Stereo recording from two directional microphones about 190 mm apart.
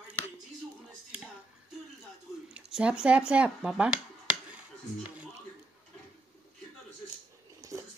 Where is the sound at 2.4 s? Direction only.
5° right (ahead or behind).